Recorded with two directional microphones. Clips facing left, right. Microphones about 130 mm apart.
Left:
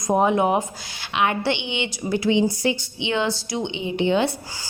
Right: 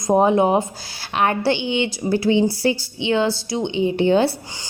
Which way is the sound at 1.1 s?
40° right (ahead or behind).